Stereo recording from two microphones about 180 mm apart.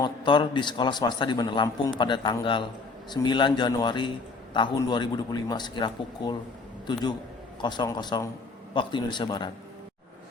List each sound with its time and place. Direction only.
0.0 s a man's voice: 25° left (ahead or behind)